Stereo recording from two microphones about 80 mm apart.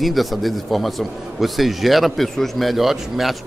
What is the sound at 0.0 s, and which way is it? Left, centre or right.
Speech, centre.